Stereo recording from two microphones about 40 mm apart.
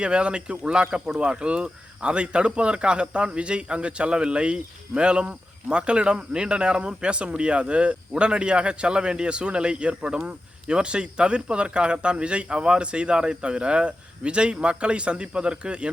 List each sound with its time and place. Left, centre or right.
0.0 s speech: right